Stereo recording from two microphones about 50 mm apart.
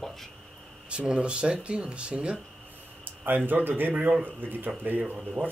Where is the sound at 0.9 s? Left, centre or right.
Right.